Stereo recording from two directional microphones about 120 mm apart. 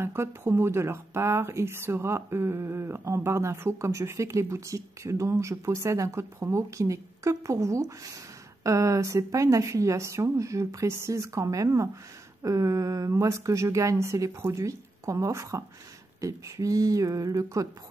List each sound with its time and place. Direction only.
0.0 s speech: 20° right (ahead or behind)